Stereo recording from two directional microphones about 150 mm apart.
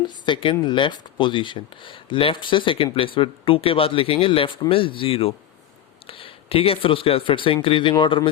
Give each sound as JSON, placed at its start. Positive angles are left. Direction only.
{"t": 0.0, "sound": "speech", "side_deg": 30}